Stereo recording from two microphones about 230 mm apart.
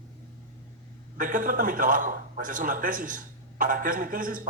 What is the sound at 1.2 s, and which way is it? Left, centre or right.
A man's voice, right.